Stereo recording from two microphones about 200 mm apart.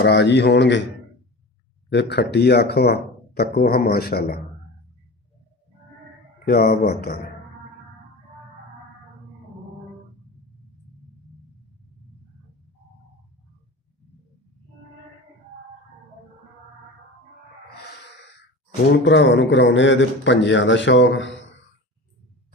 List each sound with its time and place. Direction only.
0.0 s a man's voice: 55° left (ahead or behind)
1.9 s speech: 60° left (ahead or behind)
6.5 s speech: 50° left (ahead or behind)
19.0 s a man's voice: 65° left (ahead or behind)